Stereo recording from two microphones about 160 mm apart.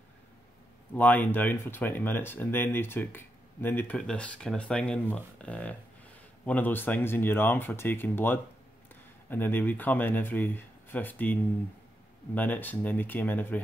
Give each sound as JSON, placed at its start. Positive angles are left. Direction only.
{"t": 0.9, "sound": "speech", "side_deg": 10}
{"t": 12.4, "sound": "speech", "side_deg": 10}